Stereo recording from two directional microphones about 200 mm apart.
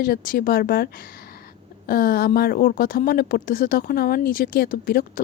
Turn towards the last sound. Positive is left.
turn(degrees=45)  # may be behind; listen again after turning